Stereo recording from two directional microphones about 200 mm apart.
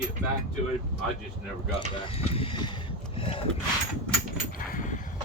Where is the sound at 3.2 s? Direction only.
30° left (ahead or behind).